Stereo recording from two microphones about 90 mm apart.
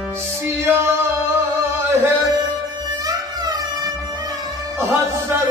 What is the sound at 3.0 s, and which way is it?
Music, 45° right (ahead or behind).